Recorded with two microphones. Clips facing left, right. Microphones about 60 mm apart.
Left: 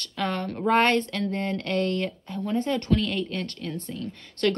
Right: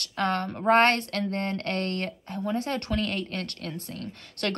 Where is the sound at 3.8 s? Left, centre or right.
Right.